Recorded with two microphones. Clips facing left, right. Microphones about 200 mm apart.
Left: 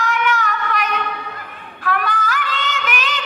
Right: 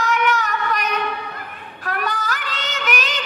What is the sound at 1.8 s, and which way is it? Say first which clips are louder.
Child singing: left 3 dB; 40° right (ahead or behind).